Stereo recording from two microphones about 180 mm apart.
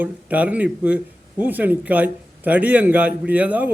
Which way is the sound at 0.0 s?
10° right (ahead or behind).